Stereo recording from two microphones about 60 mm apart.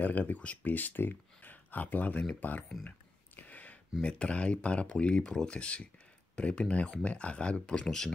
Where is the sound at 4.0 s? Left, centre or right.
Centre.